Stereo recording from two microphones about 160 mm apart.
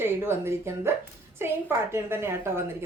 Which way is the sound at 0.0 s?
15° right (ahead or behind).